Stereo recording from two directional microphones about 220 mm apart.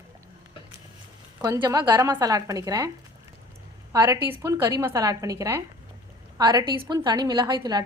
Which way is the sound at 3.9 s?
15° right (ahead or behind).